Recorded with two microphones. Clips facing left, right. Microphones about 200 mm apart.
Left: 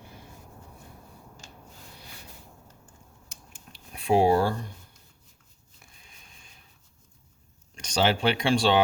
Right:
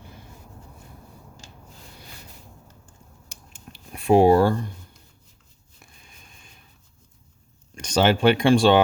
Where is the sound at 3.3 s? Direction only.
55° right (ahead or behind).